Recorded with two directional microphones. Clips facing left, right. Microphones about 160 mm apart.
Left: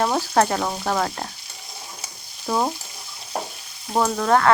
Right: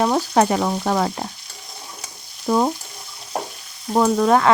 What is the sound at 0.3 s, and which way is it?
Speech, 10° right (ahead or behind).